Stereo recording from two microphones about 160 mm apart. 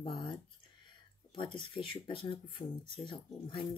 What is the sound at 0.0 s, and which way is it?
Speech, 30° left (ahead or behind).